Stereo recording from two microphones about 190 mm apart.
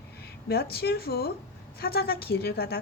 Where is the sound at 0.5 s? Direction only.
55° left (ahead or behind).